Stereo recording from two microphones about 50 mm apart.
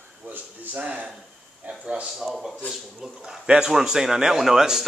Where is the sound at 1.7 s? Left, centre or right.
Centre.